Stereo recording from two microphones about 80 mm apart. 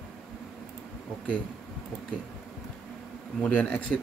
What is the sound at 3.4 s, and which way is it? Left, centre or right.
Speech, centre.